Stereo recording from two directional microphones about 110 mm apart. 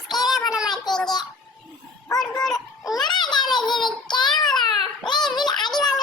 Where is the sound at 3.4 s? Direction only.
5° left (ahead or behind).